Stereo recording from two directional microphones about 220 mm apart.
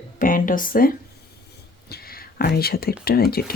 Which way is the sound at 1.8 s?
45° left (ahead or behind).